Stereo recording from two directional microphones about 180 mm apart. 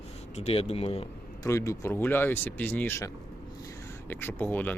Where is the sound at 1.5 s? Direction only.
15° left (ahead or behind).